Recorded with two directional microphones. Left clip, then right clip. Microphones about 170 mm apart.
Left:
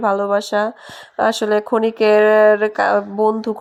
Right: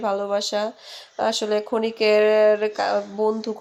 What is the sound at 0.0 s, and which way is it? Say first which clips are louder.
Speech: left 6 dB; 25° left (ahead or behind).